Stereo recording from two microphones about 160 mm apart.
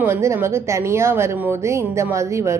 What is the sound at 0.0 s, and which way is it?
A woman's voice, 15° right (ahead or behind).